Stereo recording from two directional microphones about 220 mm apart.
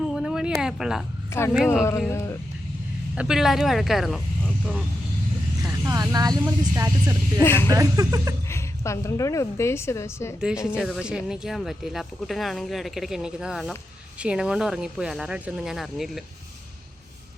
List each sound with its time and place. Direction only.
0.1 s a sound: centre (ahead or behind)
0.6 s speech: centre (ahead or behind)
1.3 s speech: 10° left (ahead or behind)
1.5 s speech: centre (ahead or behind)
2.0 s speech: 10° left (ahead or behind)
3.2 s speech: centre (ahead or behind)
5.8 s speech: 15° right (ahead or behind)
7.4 s speech: 10° left (ahead or behind)
7.7 s speech: 15° right (ahead or behind)
8.4 s speech: 10° left (ahead or behind)
10.8 s speech: centre (ahead or behind)